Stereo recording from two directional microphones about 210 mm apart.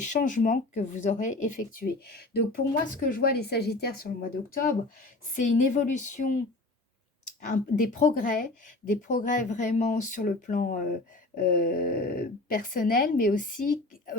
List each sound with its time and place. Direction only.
0.0 s speech: 35° left (ahead or behind)
5.3 s speech: 40° left (ahead or behind)
7.4 s speech: 40° left (ahead or behind)